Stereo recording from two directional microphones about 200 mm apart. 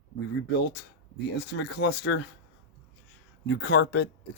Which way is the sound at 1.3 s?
60° left (ahead or behind).